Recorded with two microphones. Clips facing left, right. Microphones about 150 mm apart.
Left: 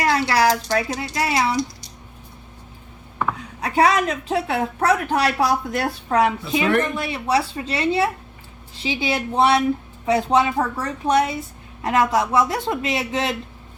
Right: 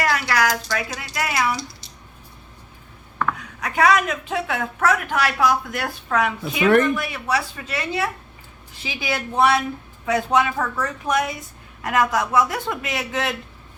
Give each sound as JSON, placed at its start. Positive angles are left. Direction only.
{"t": 0.0, "sound": "a woman's voice", "side_deg": 25}
{"t": 3.3, "sound": "a woman's voice", "side_deg": 30}